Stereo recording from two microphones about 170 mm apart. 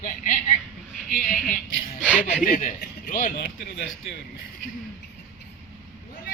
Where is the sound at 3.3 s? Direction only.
75° left (ahead or behind).